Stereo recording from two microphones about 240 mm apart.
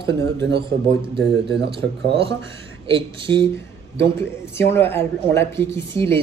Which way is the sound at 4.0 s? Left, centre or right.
Centre.